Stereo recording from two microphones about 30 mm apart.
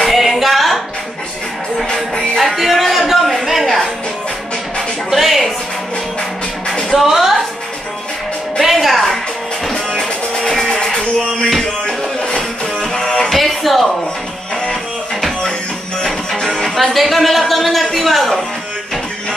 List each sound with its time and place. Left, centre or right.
0.1 s a sound: centre
2.1 s music: centre
3.1 s a sound: centre
5.1 s music: centre
7.0 s music: centre
8.8 s music: centre
9.7 s music: centre
13.3 s music: centre
16.3 s music: left
16.6 s a sound: centre